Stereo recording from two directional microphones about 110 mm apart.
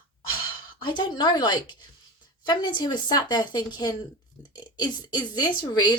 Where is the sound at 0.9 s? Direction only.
40° left (ahead or behind).